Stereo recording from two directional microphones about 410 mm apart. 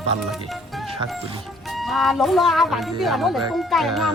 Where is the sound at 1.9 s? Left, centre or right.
Centre.